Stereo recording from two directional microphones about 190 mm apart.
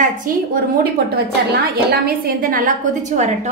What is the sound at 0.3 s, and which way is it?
A woman's voice, 45° right (ahead or behind).